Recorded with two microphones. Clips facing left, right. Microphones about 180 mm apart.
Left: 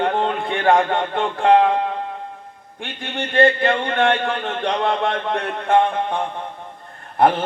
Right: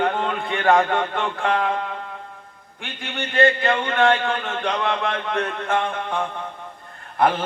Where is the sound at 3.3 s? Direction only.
35° left (ahead or behind).